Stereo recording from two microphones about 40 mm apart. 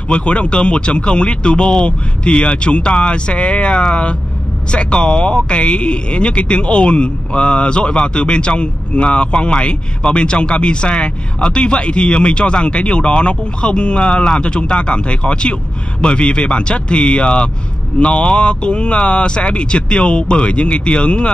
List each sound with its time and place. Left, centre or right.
0.1 s speech: left